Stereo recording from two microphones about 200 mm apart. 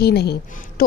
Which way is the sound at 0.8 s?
50° left (ahead or behind).